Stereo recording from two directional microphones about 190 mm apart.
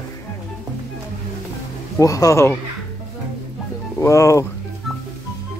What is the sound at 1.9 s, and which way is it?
Speech, 15° left (ahead or behind).